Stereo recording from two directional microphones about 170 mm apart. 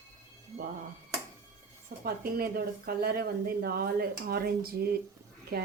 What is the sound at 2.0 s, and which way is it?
Speech, 60° right (ahead or behind).